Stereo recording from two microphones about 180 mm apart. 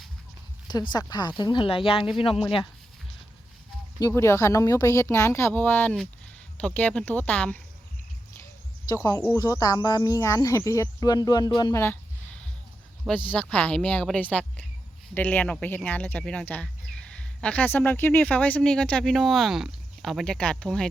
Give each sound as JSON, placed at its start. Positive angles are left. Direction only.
{"t": 0.9, "sound": "speech", "side_deg": 25}
{"t": 4.0, "sound": "speech", "side_deg": 15}
{"t": 9.0, "sound": "speech", "side_deg": 15}
{"t": 13.1, "sound": "speech", "side_deg": 10}